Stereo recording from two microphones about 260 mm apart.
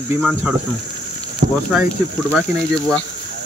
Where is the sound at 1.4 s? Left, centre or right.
Right.